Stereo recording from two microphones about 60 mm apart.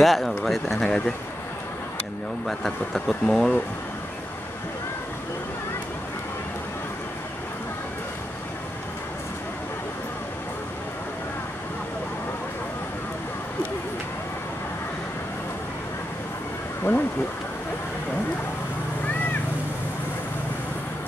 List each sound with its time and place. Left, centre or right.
0.0 s speech: centre
0.8 s speech: centre
2.4 s speech: centre
16.9 s a sound: left